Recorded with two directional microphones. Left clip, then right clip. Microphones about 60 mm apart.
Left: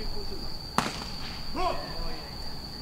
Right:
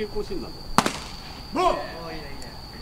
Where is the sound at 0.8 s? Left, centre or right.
Right.